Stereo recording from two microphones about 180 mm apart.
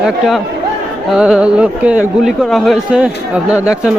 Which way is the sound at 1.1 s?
5° right (ahead or behind).